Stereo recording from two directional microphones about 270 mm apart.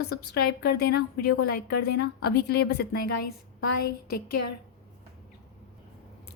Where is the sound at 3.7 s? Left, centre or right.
Left.